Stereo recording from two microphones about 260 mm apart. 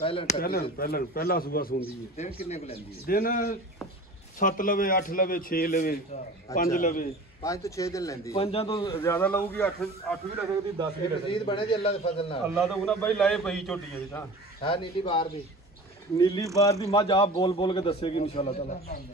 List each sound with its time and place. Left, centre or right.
0.0 s a man's voice: left
0.4 s a man's voice: left
7.4 s a man's voice: centre
8.9 s a man's voice: centre
11.3 s a man's voice: centre
12.5 s a man's voice: centre
14.6 s a man's voice: centre